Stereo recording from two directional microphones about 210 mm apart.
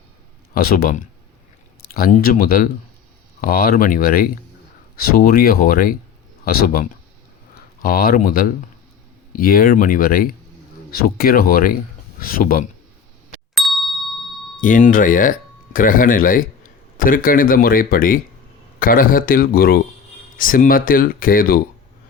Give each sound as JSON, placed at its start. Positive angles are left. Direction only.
{"t": 0.5, "sound": "speech", "side_deg": 45}
{"t": 13.5, "sound": "ding", "side_deg": 0}
{"t": 14.6, "sound": "speech", "side_deg": 40}